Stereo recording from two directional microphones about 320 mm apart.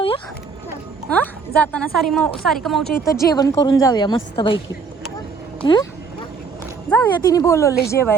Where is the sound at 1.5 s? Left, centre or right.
Centre.